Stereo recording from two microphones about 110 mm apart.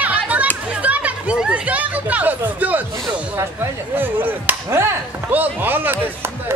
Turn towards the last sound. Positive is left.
turn(degrees=-20)  # may be behind; listen again after turning